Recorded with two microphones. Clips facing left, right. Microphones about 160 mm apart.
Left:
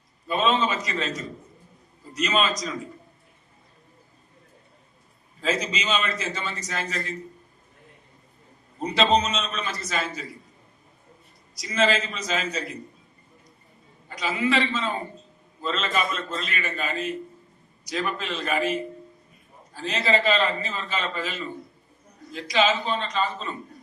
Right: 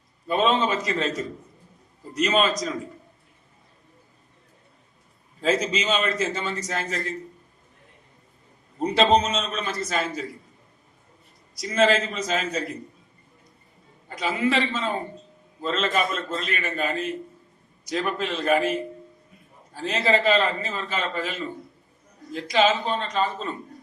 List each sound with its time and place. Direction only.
0.3 s a man's voice: 50° right (ahead or behind)
2.1 s a man's voice: 50° right (ahead or behind)
5.4 s a man's voice: 50° right (ahead or behind)
8.8 s a man's voice: 50° right (ahead or behind)
11.6 s a man's voice: 50° right (ahead or behind)
14.2 s a man's voice: 50° right (ahead or behind)